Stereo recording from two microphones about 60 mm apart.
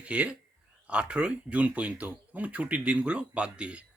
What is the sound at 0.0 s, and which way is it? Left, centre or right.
Speech, right.